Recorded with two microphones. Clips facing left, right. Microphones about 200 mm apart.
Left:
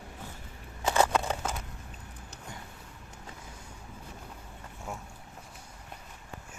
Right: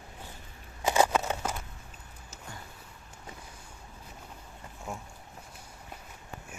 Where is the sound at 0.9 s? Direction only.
10° right (ahead or behind).